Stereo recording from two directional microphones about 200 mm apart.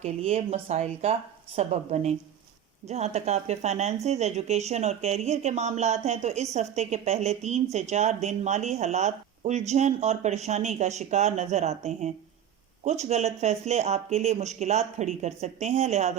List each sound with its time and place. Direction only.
0.0 s speech: 30° right (ahead or behind)